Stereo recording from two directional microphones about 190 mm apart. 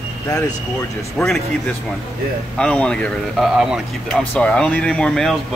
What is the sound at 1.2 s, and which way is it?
Speech, 5° left (ahead or behind).